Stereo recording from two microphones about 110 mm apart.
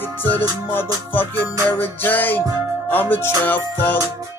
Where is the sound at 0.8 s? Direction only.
20° left (ahead or behind).